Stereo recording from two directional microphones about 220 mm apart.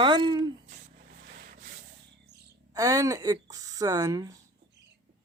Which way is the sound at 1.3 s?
40° right (ahead or behind).